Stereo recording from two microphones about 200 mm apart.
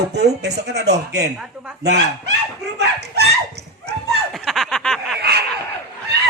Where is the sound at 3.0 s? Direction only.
55° right (ahead or behind).